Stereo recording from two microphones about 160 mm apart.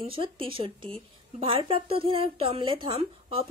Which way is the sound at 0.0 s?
35° right (ahead or behind).